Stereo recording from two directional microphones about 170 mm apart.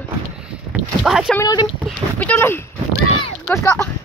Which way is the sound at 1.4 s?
25° left (ahead or behind).